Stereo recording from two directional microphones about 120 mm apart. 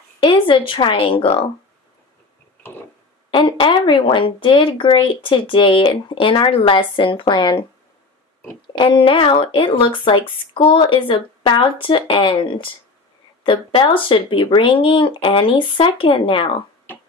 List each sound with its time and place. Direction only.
0.2 s speech: 45° left (ahead or behind)
3.3 s speech: 45° left (ahead or behind)
8.7 s speech: 45° left (ahead or behind)